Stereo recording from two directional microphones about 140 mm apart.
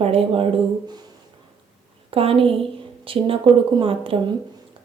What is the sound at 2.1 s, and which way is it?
A woman's voice, 45° right (ahead or behind).